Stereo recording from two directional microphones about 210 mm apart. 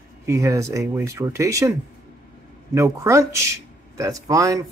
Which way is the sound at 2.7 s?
15° right (ahead or behind).